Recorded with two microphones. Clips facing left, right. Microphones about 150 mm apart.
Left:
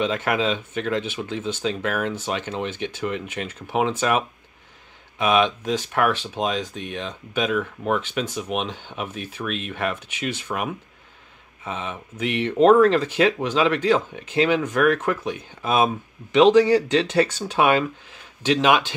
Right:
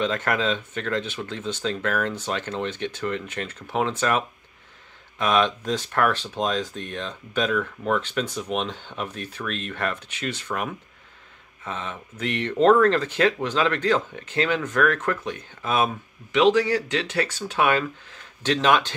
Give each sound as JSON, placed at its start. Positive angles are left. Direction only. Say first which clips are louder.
{"t": 0.0, "sound": "speech", "louder": "left 2 dB", "side_deg": 10}
{"t": 5.2, "sound": "speech", "louder": "left 2 dB", "side_deg": 10}